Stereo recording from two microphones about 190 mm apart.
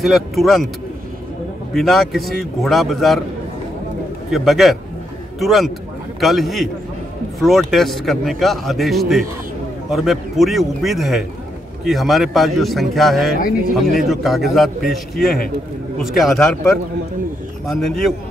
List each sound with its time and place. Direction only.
0.0 s speech: centre (ahead or behind)
1.7 s speech: centre (ahead or behind)
4.3 s speech: centre (ahead or behind)
15.2 s a man's voice: 50° left (ahead or behind)
16.0 s speech: centre (ahead or behind)